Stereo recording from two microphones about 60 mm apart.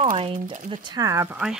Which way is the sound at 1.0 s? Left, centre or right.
Right.